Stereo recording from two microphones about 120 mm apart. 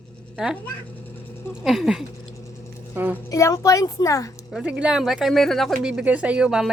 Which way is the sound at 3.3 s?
25° left (ahead or behind).